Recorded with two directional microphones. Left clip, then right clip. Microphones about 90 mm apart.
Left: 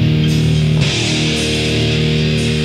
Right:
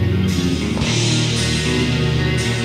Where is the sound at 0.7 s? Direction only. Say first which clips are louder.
Left 4 dB; 30° left (ahead or behind).